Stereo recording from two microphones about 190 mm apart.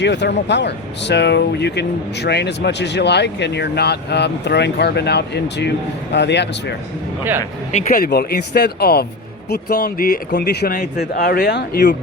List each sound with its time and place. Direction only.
0.0 s speech: 65° left (ahead or behind)
7.7 s speech: 45° left (ahead or behind); by 11.9 s 60° left (ahead or behind)